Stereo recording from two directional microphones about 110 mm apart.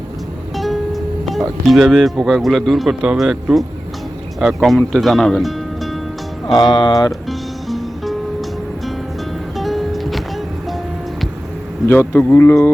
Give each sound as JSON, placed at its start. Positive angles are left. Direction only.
{"t": 0.5, "sound": "a man's voice", "side_deg": 0}
{"t": 6.5, "sound": "speech", "side_deg": 45}
{"t": 7.1, "sound": "music", "side_deg": 0}
{"t": 9.6, "sound": "music", "side_deg": 0}
{"t": 11.9, "sound": "speech", "side_deg": 20}